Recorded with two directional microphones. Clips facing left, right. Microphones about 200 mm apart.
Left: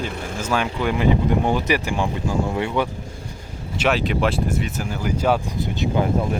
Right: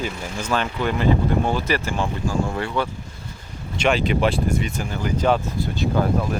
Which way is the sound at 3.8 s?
Centre (ahead or behind).